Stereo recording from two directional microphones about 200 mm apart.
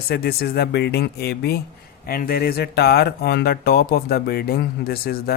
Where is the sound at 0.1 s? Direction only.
50° left (ahead or behind).